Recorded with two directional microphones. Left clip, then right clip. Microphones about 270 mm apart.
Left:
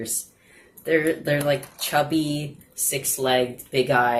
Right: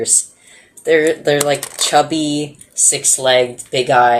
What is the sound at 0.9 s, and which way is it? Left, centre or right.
Speech, right.